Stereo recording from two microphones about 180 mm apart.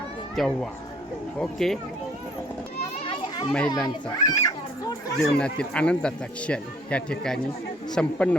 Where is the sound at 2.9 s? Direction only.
30° left (ahead or behind).